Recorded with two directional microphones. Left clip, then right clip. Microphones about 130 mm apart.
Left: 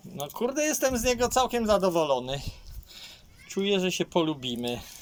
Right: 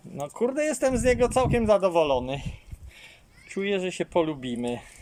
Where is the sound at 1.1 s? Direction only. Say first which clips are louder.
Right 2 dB; 15° right (ahead or behind).